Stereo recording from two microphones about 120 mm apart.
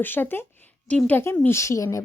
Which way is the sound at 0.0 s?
15° left (ahead or behind).